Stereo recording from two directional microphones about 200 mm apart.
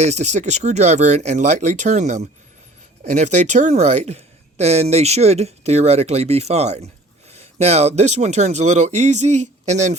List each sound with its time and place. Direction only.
0.0 s speech: 35° right (ahead or behind)